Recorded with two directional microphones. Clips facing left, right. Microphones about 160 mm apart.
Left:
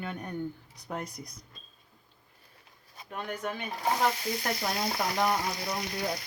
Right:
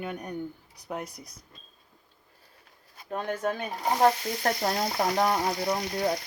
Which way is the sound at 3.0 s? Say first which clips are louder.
Right 6 dB; 40° right (ahead or behind).